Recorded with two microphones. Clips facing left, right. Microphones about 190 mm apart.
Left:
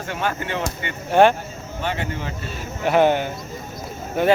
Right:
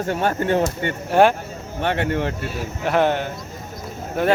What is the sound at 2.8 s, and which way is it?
Speech, centre (ahead or behind).